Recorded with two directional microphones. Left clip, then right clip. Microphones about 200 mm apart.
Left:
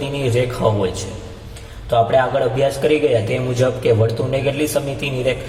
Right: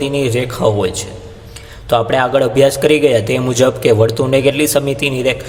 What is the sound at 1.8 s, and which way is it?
A man's voice, 45° right (ahead or behind).